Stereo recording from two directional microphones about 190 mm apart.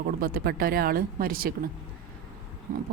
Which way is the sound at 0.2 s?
50° right (ahead or behind).